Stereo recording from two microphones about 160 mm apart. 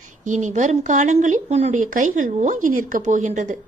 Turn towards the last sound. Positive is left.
turn(degrees=-50)  # may be behind; listen again after turning